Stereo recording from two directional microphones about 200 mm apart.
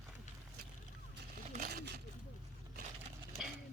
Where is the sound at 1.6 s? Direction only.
55° right (ahead or behind).